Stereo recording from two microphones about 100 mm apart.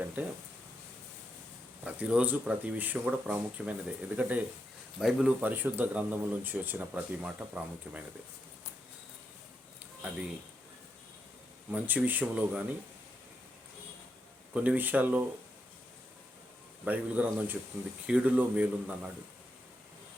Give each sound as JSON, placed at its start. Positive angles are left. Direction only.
{"t": 0.2, "sound": "speech", "side_deg": -20}
{"t": 1.8, "sound": "speech", "side_deg": -15}
{"t": 4.9, "sound": "speech", "side_deg": -5}
{"t": 5.4, "sound": "speech", "side_deg": -20}
{"t": 11.7, "sound": "speech", "side_deg": -15}
{"t": 14.5, "sound": "speech", "side_deg": -15}
{"t": 16.8, "sound": "speech", "side_deg": -15}